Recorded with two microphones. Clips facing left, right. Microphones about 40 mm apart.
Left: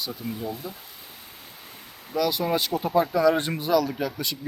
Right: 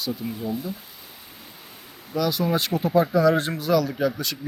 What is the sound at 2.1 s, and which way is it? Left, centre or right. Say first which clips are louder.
Speech: right 1 dB; centre.